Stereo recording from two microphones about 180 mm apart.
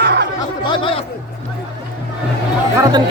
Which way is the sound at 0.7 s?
30° left (ahead or behind).